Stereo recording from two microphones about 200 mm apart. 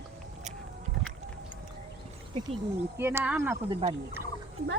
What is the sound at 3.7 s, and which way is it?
Speech, 30° right (ahead or behind).